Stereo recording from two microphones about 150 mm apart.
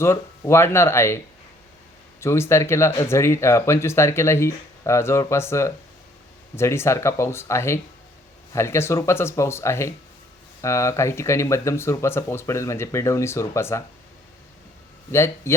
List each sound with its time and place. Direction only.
0.0 s speech: 15° left (ahead or behind)
2.2 s speech: 15° left (ahead or behind)
15.1 s speech: 15° left (ahead or behind)